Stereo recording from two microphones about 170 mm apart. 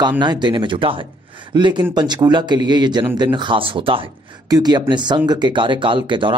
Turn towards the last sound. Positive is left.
turn(degrees=-30)  # may be behind; listen again after turning